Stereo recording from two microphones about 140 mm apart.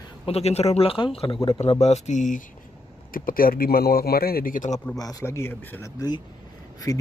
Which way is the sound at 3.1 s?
90° left.